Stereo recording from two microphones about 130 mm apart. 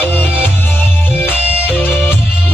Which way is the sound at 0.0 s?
15° left (ahead or behind).